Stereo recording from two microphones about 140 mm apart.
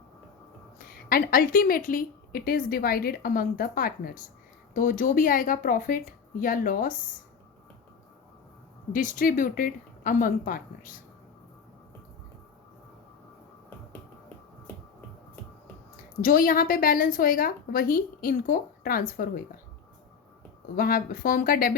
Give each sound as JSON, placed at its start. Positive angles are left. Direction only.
{"t": 1.1, "sound": "a woman's voice", "side_deg": 90}
{"t": 4.7, "sound": "speech", "side_deg": 75}
{"t": 8.9, "sound": "speech", "side_deg": 70}
{"t": 16.2, "sound": "a woman's voice", "side_deg": 80}
{"t": 20.7, "sound": "a woman's voice", "side_deg": 90}